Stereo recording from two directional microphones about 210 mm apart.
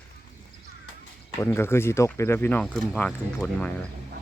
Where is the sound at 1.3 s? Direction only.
10° left (ahead or behind).